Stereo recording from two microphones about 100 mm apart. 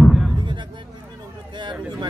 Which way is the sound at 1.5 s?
50° right (ahead or behind).